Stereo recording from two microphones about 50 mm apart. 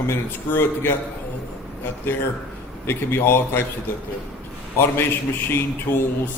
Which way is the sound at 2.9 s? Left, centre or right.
Left.